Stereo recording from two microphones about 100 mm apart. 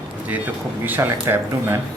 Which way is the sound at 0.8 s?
20° right (ahead or behind).